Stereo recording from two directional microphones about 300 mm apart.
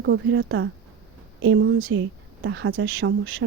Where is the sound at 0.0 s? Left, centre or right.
Right.